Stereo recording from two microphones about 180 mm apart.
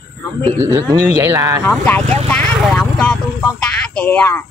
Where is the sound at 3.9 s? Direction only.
10° left (ahead or behind).